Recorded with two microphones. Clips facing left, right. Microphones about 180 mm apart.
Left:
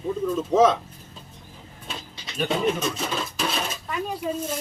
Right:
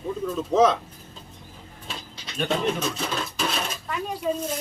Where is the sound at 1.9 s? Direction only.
Centre (ahead or behind).